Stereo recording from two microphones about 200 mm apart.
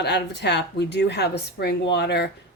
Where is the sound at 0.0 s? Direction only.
55° left (ahead or behind).